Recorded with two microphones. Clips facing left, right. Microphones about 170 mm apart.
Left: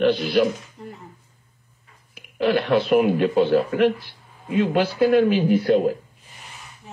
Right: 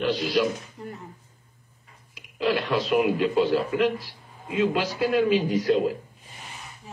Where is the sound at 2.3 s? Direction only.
60° left (ahead or behind).